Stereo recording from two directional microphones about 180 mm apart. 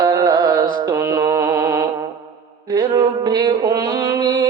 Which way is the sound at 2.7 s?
20° right (ahead or behind).